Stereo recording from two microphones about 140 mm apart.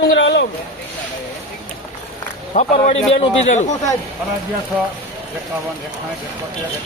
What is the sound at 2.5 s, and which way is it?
Speech, 50° left (ahead or behind).